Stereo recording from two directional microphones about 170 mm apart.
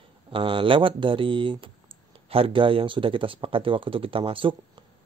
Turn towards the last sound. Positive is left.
turn(degrees=-30)  # may be behind; listen again after turning